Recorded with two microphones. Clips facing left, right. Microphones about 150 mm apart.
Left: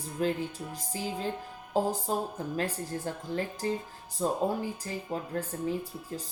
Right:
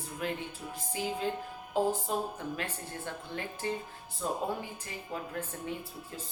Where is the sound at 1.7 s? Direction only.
35° left (ahead or behind).